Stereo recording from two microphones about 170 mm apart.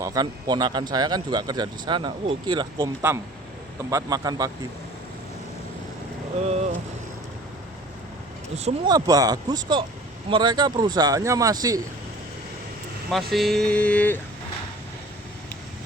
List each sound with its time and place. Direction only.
0.0 s speech: 20° right (ahead or behind)
6.4 s speech: 40° right (ahead or behind)
8.9 s speech: 20° right (ahead or behind)
13.1 s speech: centre (ahead or behind)